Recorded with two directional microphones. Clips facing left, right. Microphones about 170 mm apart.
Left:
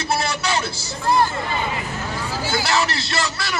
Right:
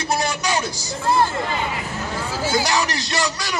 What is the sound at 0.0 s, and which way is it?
Vehicle, 15° right (ahead or behind).